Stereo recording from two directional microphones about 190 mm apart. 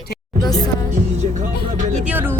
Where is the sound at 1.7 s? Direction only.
40° right (ahead or behind).